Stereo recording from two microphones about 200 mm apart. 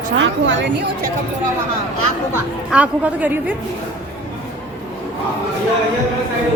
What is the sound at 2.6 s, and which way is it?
Speech, 5° right (ahead or behind).